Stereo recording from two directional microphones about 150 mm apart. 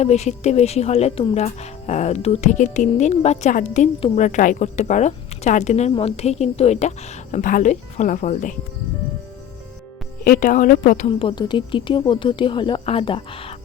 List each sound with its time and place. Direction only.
0.0 s speech: 50° left (ahead or behind)
10.2 s a woman's voice: 70° left (ahead or behind)
11.1 s speech: 35° left (ahead or behind)